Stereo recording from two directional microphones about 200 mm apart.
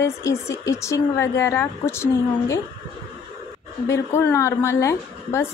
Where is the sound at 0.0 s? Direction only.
15° left (ahead or behind).